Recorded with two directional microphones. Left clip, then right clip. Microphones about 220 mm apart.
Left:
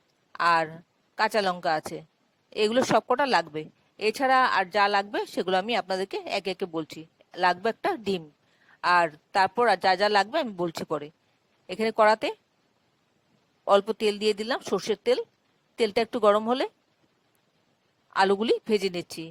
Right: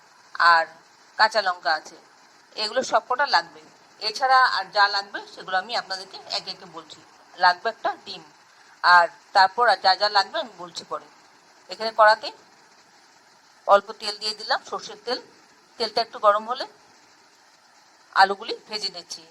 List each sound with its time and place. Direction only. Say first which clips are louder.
0.3 s a woman's voice: right 6 dB; 45° left (ahead or behind)
13.7 s a woman's voice: right 3 dB; 45° left (ahead or behind)
18.1 s a woman's voice: right 3 dB; 45° left (ahead or behind)